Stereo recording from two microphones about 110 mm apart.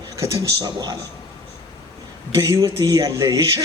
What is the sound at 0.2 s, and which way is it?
Speech, 30° right (ahead or behind).